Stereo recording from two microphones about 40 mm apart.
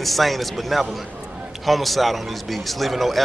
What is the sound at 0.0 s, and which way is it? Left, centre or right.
A man's voice, centre.